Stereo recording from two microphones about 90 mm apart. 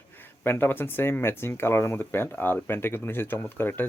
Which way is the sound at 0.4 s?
25° left (ahead or behind).